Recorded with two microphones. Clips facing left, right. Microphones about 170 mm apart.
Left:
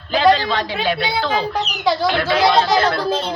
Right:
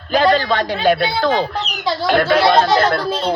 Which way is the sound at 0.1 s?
50° right (ahead or behind).